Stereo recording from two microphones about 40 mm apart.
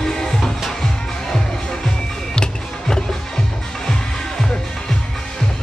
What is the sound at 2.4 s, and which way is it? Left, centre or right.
Music, centre.